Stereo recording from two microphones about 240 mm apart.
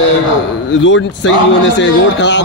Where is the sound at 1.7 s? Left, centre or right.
Left.